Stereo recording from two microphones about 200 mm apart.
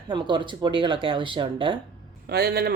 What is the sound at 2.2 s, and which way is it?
Speech, 50° right (ahead or behind).